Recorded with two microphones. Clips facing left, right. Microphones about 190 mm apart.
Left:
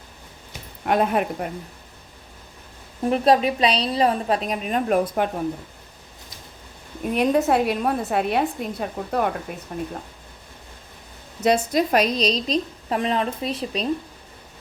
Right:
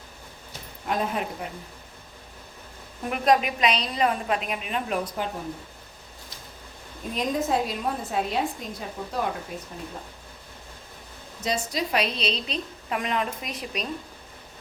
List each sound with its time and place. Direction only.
0.9 s a woman's voice: 65° left (ahead or behind)
3.1 s a woman's voice: 30° left (ahead or behind); by 5.3 s 55° left (ahead or behind)
7.1 s a woman's voice: 65° left (ahead or behind)
11.4 s a woman's voice: 55° left (ahead or behind); by 13.8 s 30° left (ahead or behind)